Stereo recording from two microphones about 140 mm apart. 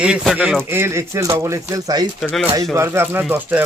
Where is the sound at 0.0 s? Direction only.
5° right (ahead or behind); by 2.0 s 25° right (ahead or behind).